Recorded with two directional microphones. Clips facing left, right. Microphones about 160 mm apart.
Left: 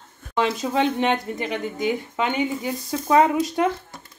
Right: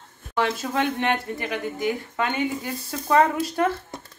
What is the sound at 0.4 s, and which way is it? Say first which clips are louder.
Speech: left 3 dB; 20° left (ahead or behind).